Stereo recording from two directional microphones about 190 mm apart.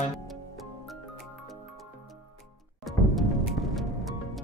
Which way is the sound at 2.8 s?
Centre (ahead or behind).